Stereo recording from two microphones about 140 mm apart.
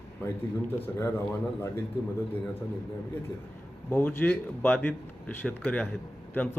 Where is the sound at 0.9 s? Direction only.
15° left (ahead or behind).